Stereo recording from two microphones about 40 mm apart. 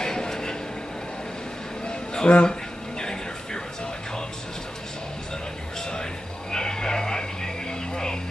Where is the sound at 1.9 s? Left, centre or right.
Left.